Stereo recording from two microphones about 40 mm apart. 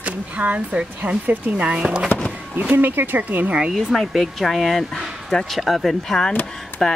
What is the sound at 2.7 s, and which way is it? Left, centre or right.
Speech, right.